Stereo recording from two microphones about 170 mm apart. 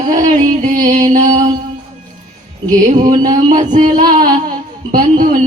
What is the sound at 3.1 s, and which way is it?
Speech, 45° right (ahead or behind).